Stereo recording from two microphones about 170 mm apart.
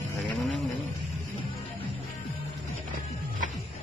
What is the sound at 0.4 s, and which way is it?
Roaring cats, centre (ahead or behind).